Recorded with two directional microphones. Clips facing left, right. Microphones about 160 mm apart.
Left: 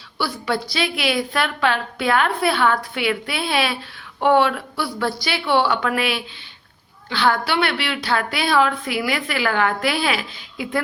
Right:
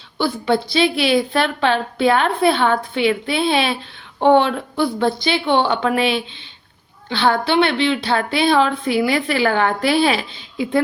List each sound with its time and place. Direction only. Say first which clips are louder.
0.2 s a woman's voice: right 5 dB; 25° right (ahead or behind)